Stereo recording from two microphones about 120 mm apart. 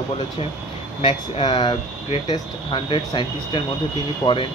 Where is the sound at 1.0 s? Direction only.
50° left (ahead or behind).